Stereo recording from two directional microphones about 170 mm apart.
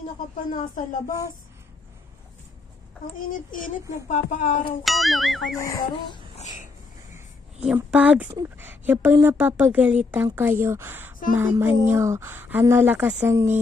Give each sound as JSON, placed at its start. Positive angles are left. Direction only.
{"t": 1.0, "sound": "speech", "side_deg": 20}
{"t": 3.2, "sound": "a child's voice", "side_deg": 55}
{"t": 4.8, "sound": "music", "side_deg": 0}
{"t": 5.6, "sound": "speech", "side_deg": 20}
{"t": 6.3, "sound": "a sound", "side_deg": 45}
{"t": 7.6, "sound": "speech", "side_deg": -10}